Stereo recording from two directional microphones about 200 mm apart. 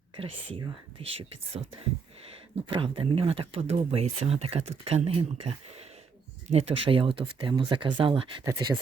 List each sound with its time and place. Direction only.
0.2 s speech: 25° right (ahead or behind)